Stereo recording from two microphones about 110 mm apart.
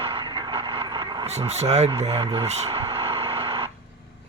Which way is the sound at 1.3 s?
85° right.